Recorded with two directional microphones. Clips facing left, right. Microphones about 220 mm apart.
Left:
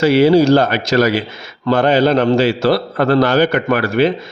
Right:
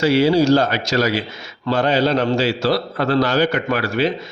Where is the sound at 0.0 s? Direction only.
55° left (ahead or behind).